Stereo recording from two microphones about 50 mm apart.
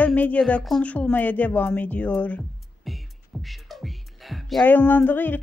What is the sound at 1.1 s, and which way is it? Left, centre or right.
Speech, left.